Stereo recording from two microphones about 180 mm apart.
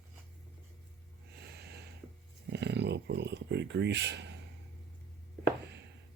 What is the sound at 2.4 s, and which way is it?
Speech, 70° right (ahead or behind).